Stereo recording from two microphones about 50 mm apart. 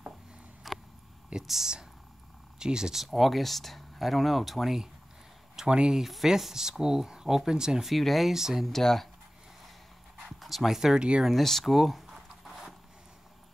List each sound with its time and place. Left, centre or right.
0.7 s a sound: centre
1.4 s speech: centre
5.7 s speech: centre
6.0 s speech: centre
7.9 s speech: centre
8.6 s speech: centre
10.4 s speech: centre
11.4 s speech: centre
12.4 s a sound: centre